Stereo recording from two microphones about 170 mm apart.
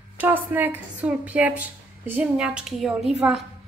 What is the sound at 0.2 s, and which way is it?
A woman's voice, 10° right (ahead or behind).